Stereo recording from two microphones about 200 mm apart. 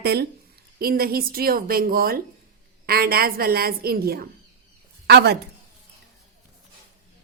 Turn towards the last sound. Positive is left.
turn(degrees=-55)  # may be behind; listen again after turning